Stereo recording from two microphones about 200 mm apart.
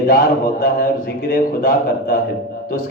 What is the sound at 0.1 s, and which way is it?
A man's voice, 45° left (ahead or behind).